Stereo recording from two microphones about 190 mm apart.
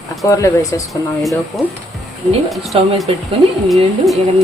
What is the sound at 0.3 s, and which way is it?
Speech, 15° left (ahead or behind).